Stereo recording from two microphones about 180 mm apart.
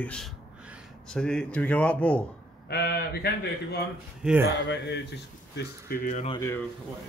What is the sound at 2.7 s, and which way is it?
Speech, 60° left (ahead or behind).